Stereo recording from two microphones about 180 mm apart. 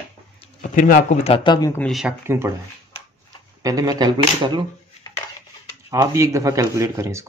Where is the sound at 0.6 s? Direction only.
45° left (ahead or behind); by 1.7 s 25° left (ahead or behind).